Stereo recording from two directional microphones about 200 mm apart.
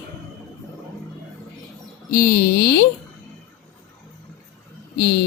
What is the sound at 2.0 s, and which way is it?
Speech, 45° left (ahead or behind).